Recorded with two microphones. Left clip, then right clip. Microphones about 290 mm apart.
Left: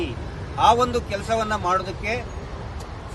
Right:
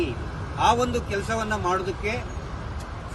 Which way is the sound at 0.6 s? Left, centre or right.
Centre.